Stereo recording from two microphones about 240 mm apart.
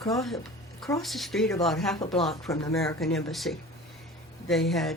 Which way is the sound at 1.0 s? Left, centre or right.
Centre.